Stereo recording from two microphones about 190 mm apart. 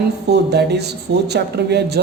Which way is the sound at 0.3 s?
60° right (ahead or behind).